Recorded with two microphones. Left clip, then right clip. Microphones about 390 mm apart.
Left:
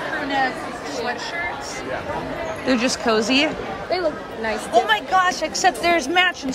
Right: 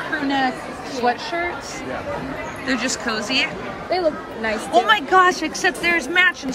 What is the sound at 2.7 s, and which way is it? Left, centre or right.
Speech, centre.